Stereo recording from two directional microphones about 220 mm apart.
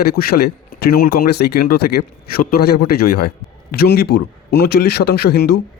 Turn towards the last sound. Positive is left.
turn(degrees=45)  # may be behind; listen again after turning